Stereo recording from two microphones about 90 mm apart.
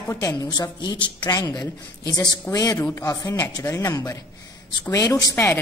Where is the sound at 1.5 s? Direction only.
40° left (ahead or behind).